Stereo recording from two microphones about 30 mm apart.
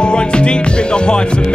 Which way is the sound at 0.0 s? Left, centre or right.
Left.